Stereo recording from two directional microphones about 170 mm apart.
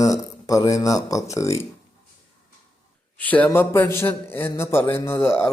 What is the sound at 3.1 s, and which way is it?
Speech, 10° left (ahead or behind).